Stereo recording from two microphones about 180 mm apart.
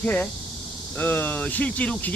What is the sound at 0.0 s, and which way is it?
Speech, 10° left (ahead or behind).